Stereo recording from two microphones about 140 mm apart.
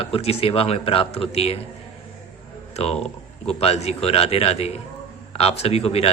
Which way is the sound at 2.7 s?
45° left (ahead or behind).